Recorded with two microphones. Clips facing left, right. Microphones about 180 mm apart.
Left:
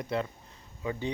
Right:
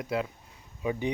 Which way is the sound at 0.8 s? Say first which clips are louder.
Right 3 dB; 15° right (ahead or behind).